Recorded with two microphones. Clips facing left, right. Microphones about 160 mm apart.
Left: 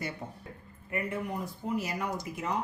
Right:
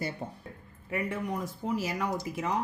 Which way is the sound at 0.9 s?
90° right.